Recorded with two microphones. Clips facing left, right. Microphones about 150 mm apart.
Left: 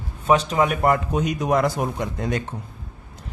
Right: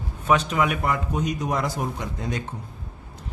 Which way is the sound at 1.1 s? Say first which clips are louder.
Left 5 dB; 70° left (ahead or behind).